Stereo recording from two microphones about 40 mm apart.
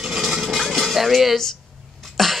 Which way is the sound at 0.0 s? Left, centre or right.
Centre.